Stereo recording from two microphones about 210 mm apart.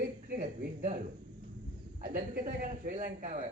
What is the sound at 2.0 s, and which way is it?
Speech, 40° right (ahead or behind).